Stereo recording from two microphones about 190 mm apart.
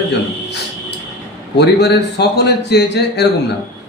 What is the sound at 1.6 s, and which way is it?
Speech, 60° left (ahead or behind).